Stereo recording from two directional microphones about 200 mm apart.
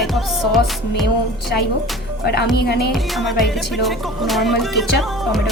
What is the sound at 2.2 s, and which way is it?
Speech, 55° left (ahead or behind).